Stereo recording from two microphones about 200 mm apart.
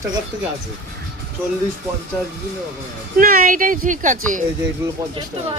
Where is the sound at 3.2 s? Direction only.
45° right (ahead or behind).